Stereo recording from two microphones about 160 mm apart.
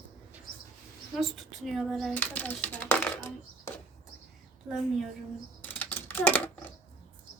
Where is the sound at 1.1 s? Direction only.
Centre (ahead or behind).